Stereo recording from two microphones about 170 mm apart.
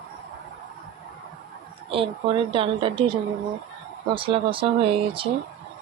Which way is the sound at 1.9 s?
30° right (ahead or behind).